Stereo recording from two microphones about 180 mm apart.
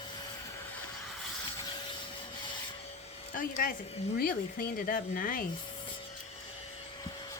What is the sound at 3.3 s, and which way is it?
Speech, 50° left (ahead or behind).